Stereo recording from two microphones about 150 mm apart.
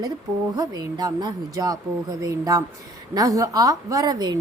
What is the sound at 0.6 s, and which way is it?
Speech, 25° right (ahead or behind).